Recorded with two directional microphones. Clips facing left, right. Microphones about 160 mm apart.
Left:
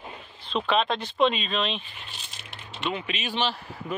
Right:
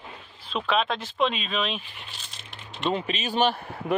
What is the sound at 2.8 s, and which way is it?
Speech, 35° right (ahead or behind).